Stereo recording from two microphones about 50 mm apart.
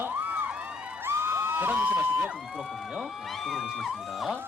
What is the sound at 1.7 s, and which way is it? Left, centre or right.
Speech, right.